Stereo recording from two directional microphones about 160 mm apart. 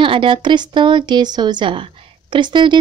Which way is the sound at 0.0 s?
35° right (ahead or behind).